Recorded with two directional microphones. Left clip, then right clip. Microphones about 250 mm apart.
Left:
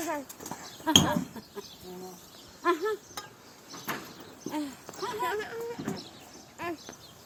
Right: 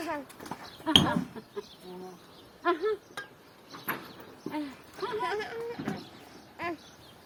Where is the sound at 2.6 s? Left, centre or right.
Left.